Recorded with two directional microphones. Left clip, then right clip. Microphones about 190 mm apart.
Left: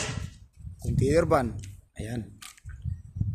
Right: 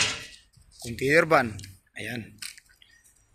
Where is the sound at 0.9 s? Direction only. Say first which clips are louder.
Right 3 dB; 15° left (ahead or behind).